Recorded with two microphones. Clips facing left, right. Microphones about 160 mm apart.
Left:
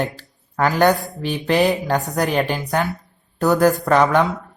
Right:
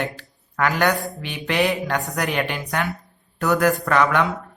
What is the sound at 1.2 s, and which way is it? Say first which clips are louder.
Speech: left 5 dB; 35° left (ahead or behind).